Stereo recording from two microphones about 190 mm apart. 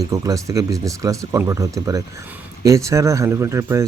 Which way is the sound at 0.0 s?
15° right (ahead or behind).